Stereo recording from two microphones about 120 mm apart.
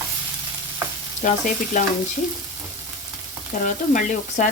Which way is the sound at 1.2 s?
90° left.